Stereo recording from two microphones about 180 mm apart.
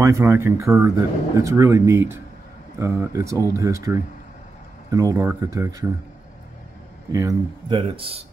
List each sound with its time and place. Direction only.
0.0 s speech: 15° right (ahead or behind)
7.1 s speech: 20° right (ahead or behind)
7.7 s speech: 30° right (ahead or behind)